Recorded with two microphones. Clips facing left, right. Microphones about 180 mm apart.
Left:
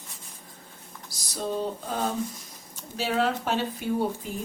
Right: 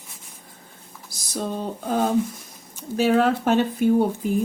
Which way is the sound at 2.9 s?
50° right (ahead or behind).